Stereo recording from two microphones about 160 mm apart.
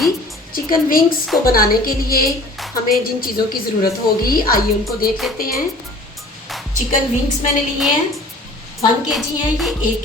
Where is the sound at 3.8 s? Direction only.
65° left (ahead or behind).